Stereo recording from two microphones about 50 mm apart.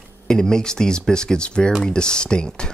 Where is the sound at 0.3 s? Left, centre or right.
Centre.